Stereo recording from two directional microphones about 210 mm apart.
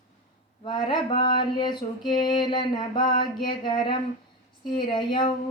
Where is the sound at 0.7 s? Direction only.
20° left (ahead or behind).